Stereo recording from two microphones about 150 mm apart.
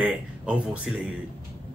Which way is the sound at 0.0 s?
5° right (ahead or behind).